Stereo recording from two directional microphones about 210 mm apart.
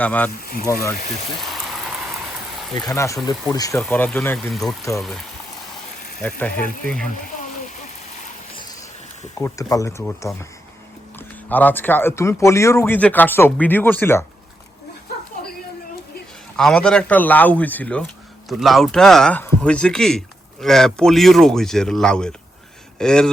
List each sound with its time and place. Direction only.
0.0 s speech: 5° left (ahead or behind)
1.4 s a sound: centre (ahead or behind)
2.7 s a man's voice: 15° left (ahead or behind)
9.4 s speech: 15° left (ahead or behind)
11.4 s speech: 10° left (ahead or behind)
16.6 s a man's voice: 5° left (ahead or behind)